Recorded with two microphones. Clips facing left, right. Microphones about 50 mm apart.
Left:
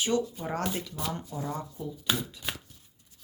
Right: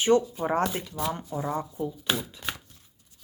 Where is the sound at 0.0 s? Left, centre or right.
Right.